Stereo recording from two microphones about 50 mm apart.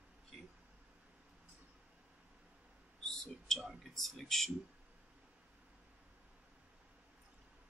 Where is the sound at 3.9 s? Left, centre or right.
Centre.